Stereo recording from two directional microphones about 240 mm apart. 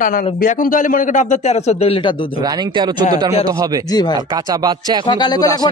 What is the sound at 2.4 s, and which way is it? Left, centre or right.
Speech, centre.